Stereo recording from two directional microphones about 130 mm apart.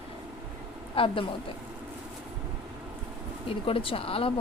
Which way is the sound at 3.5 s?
45° left (ahead or behind).